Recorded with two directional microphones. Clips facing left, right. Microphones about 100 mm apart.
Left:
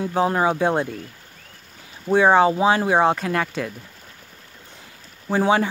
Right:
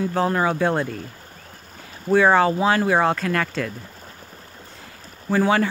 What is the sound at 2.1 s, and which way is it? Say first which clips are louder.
Speech: left 1 dB; 20° left (ahead or behind).